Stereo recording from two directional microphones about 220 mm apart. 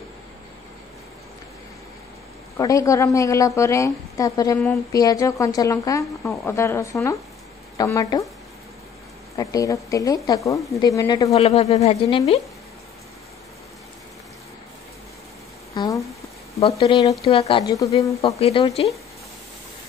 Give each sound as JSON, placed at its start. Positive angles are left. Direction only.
{"t": 2.5, "sound": "speech", "side_deg": 15}
{"t": 9.4, "sound": "speech", "side_deg": 15}
{"t": 11.4, "sound": "speech", "side_deg": 30}
{"t": 15.7, "sound": "a sound", "side_deg": 15}
{"t": 16.8, "sound": "speech", "side_deg": 25}
{"t": 18.2, "sound": "speech", "side_deg": 25}